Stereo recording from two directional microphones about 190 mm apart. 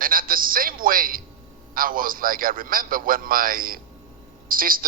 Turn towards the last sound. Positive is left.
turn(degrees=-50)  # may be behind; listen again after turning